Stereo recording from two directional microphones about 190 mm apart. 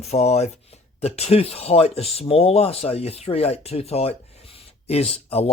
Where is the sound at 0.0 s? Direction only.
35° left (ahead or behind).